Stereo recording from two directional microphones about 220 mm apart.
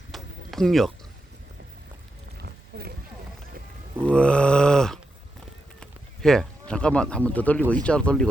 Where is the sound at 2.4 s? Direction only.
45° right (ahead or behind).